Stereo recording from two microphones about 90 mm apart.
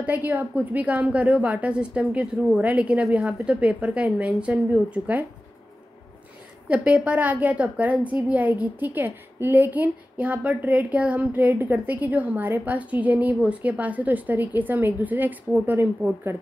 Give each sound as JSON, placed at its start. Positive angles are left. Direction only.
{"t": 0.0, "sound": "a woman's voice", "side_deg": -20}
{"t": 6.7, "sound": "a woman's voice", "side_deg": -15}